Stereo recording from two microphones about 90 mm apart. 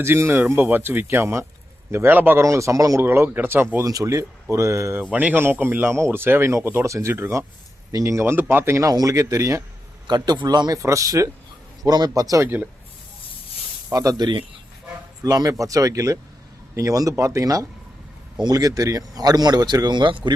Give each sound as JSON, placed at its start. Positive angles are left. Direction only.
{"t": 0.0, "sound": "speech", "side_deg": -30}
{"t": 2.4, "sound": "speech", "side_deg": -35}
{"t": 3.0, "sound": "speech", "side_deg": -25}
{"t": 3.8, "sound": "speech", "side_deg": -40}
{"t": 5.1, "sound": "speech", "side_deg": -20}
{"t": 8.9, "sound": "speech", "side_deg": -40}
{"t": 10.1, "sound": "speech", "side_deg": -50}
{"t": 10.8, "sound": "speech", "side_deg": -35}
{"t": 12.4, "sound": "speech", "side_deg": -25}
{"t": 13.9, "sound": "speech", "side_deg": -40}